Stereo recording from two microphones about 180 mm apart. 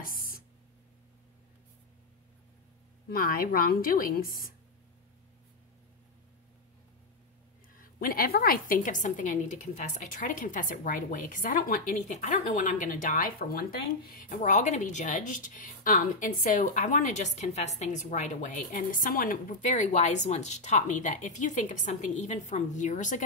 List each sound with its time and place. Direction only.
0.0 s a sound: 55° left (ahead or behind)
3.1 s a woman's voice: 50° left (ahead or behind)
7.7 s a woman's voice: 55° left (ahead or behind)